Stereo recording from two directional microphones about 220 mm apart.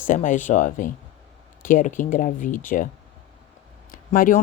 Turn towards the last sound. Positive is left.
turn(degrees=40)  # may be behind; listen again after turning